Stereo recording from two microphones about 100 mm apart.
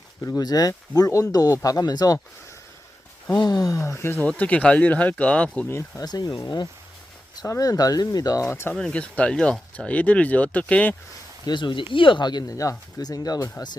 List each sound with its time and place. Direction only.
0.2 s speech: 30° left (ahead or behind)
3.3 s speech: 45° left (ahead or behind); by 4.3 s 25° left (ahead or behind)
4.3 s speech: 15° left (ahead or behind)
6.1 s speech: 40° left (ahead or behind)
8.4 s speech: 25° left (ahead or behind)
8.7 s speech: 10° left (ahead or behind)
11.4 s speech: 50° left (ahead or behind)